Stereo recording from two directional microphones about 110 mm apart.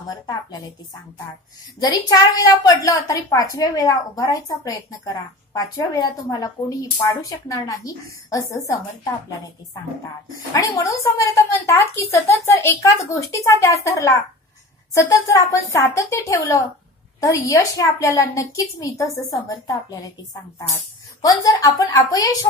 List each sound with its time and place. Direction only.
0.1 s a woman's voice: 35° left (ahead or behind)
1.8 s a woman's voice: 40° left (ahead or behind)
10.5 s a woman's voice: 30° left (ahead or behind)
15.5 s a woman's voice: 30° left (ahead or behind)